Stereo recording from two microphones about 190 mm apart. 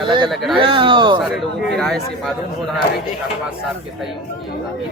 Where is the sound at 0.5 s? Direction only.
25° right (ahead or behind).